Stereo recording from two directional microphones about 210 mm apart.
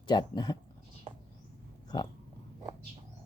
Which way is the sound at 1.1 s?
35° right (ahead or behind).